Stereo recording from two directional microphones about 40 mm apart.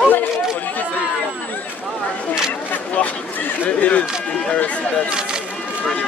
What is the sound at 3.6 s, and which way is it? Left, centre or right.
Speech, left.